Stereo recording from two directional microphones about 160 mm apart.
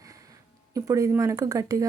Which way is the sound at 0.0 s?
20° right (ahead or behind).